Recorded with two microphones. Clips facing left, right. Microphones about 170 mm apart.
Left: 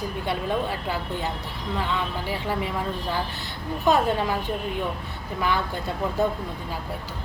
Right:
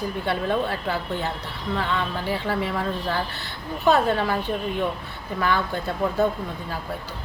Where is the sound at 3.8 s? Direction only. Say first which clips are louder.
Right 2 dB; 15° left (ahead or behind).